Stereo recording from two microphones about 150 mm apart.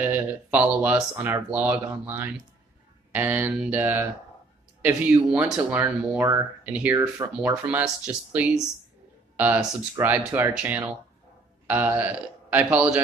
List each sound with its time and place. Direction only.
0.0 s speech: 10° right (ahead or behind)
7.0 s speech: 20° right (ahead or behind)
7.6 s a man's voice: 10° right (ahead or behind)